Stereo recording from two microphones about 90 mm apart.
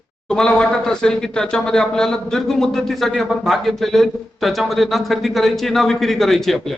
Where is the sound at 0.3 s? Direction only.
10° left (ahead or behind).